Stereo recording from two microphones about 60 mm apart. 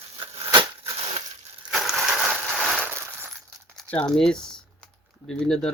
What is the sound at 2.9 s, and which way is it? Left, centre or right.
Glass, right.